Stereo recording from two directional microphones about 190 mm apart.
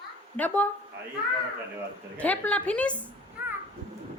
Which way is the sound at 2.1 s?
10° left (ahead or behind).